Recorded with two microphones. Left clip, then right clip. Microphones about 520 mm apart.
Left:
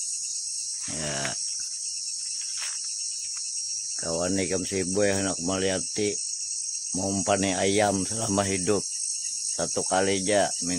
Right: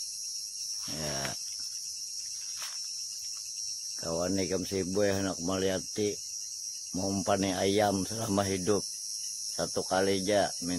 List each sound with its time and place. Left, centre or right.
4.1 s speech: right